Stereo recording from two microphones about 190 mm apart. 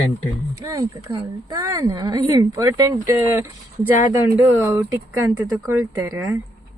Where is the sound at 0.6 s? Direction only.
15° right (ahead or behind).